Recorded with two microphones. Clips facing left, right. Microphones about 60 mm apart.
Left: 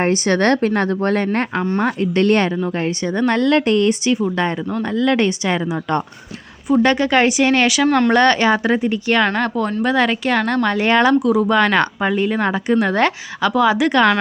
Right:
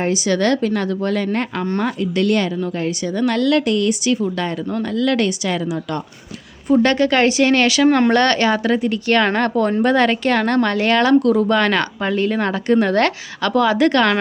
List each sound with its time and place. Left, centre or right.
0.0 s a woman's voice: left
6.7 s a woman's voice: centre
7.9 s speech: centre
8.1 s a woman's voice: centre
9.2 s a woman's voice: centre
10.8 s speech: left
11.2 s a woman's voice: centre